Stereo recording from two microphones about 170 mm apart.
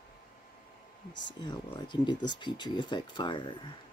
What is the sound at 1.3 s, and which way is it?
Speech, 25° left (ahead or behind).